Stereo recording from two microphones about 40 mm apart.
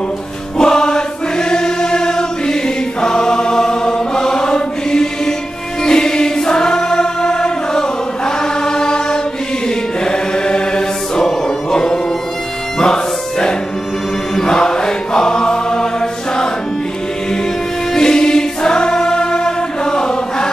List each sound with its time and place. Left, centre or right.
0.6 s choir: centre
3.0 s chant: centre
5.9 s choir: centre
10.0 s chant: centre
12.7 s music: centre
14.3 s choir: centre
17.9 s choir: centre